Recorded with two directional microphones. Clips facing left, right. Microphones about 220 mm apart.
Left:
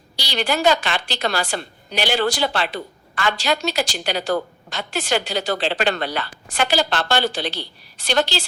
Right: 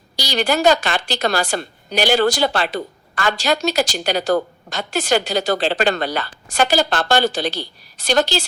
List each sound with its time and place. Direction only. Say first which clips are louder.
0.2 s a woman's voice: right 3 dB; 45° right (ahead or behind)